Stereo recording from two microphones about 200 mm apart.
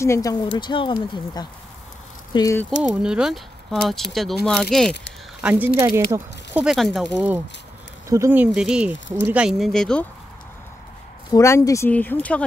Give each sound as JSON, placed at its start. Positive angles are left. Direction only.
{"t": 0.0, "sound": "speech", "side_deg": 15}
{"t": 2.8, "sound": "speech", "side_deg": -5}
{"t": 6.6, "sound": "speech", "side_deg": 0}
{"t": 11.3, "sound": "speech", "side_deg": 15}